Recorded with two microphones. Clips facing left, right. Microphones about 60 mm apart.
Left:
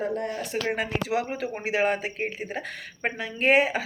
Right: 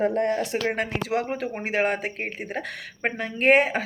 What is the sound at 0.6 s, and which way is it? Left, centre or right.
Speech, right.